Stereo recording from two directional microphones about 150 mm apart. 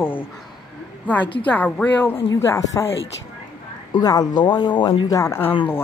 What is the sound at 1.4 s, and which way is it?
Speech, 10° left (ahead or behind).